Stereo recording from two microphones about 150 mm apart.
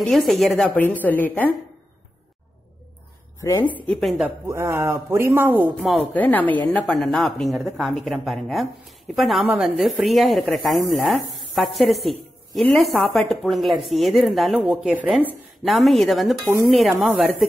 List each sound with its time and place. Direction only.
0.0 s a woman's voice: centre (ahead or behind)
3.4 s a woman's voice: 15° left (ahead or behind)
4.5 s speech: 15° right (ahead or behind)
5.8 s a woman's voice: centre (ahead or behind)
6.1 s a woman's voice: 10° left (ahead or behind)